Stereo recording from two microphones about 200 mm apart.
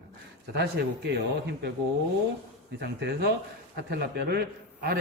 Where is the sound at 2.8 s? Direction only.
55° right (ahead or behind).